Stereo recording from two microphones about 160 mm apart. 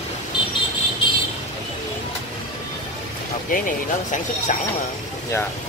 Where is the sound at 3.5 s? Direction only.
55° left (ahead or behind).